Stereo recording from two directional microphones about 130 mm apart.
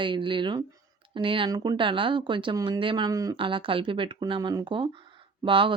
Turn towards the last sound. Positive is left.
turn(degrees=-45)  # may be behind; listen again after turning